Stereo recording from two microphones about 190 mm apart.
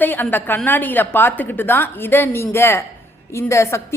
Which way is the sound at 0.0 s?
10° left (ahead or behind).